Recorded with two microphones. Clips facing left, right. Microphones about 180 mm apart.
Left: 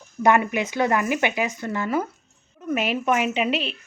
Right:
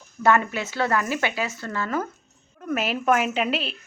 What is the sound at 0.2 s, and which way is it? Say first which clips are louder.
Speech: left 2 dB; 15° left (ahead or behind).